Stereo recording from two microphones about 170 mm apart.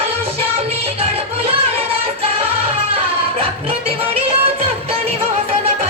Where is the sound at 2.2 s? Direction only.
35° right (ahead or behind).